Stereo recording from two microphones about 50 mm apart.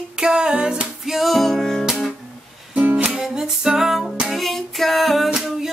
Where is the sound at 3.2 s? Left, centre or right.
Centre.